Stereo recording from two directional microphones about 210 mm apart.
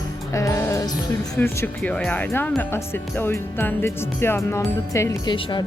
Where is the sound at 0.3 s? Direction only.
15° left (ahead or behind).